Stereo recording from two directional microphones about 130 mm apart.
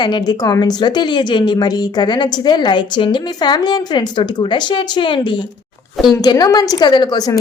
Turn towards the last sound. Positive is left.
turn(degrees=30)  # may be behind; listen again after turning